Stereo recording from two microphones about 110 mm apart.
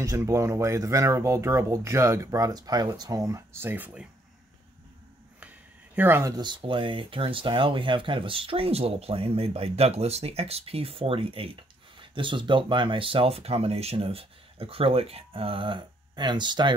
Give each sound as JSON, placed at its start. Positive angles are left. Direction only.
{"t": 0.0, "sound": "speech", "side_deg": -30}
{"t": 5.9, "sound": "speech", "side_deg": -20}
{"t": 6.3, "sound": "speech", "side_deg": -45}